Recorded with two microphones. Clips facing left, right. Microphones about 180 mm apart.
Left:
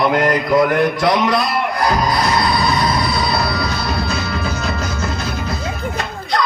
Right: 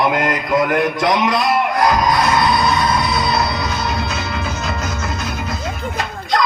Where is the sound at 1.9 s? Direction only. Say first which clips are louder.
Right 1 dB; 35° left (ahead or behind).